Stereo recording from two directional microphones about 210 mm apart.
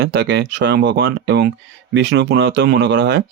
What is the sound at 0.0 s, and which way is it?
Speech, 50° right (ahead or behind).